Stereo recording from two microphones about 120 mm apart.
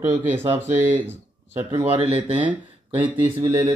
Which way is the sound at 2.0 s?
55° right (ahead or behind).